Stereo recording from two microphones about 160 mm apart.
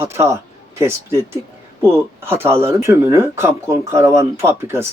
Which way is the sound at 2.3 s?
15° right (ahead or behind).